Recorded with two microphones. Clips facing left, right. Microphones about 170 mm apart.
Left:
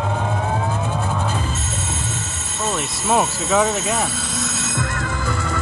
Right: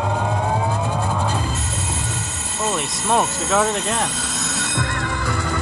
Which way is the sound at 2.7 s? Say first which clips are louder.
Left 1 dB; centre (ahead or behind).